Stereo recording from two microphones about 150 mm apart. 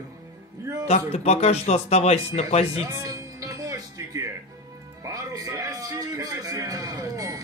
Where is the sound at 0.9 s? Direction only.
45° left (ahead or behind).